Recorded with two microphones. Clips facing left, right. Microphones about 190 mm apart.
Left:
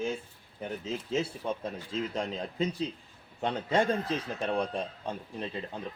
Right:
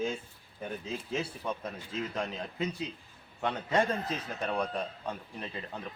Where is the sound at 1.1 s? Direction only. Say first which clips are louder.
Left 4 dB; 25° left (ahead or behind).